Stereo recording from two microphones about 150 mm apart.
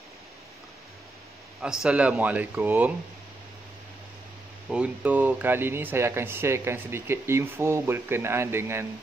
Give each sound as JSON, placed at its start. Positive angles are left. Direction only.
{"t": 1.6, "sound": "speech", "side_deg": -5}
{"t": 4.6, "sound": "speech", "side_deg": -10}